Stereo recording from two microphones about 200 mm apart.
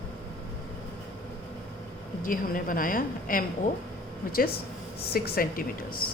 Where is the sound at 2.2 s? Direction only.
45° left (ahead or behind).